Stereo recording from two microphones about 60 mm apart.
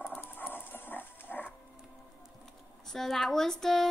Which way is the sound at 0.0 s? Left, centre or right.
Left.